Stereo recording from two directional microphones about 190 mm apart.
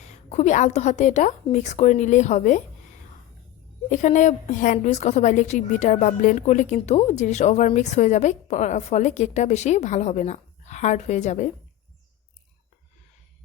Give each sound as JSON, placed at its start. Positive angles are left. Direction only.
{"t": 0.3, "sound": "a woman's voice", "side_deg": 35}
{"t": 3.8, "sound": "a woman's voice", "side_deg": 40}